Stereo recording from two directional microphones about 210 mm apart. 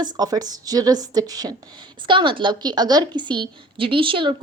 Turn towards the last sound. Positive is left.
turn(degrees=-25)  # may be behind; listen again after turning